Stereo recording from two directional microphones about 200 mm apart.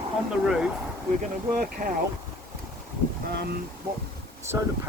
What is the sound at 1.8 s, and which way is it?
Speech, 35° right (ahead or behind).